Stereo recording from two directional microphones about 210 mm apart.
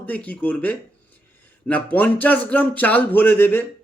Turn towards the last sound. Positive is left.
turn(degrees=10)  # may be behind; listen again after turning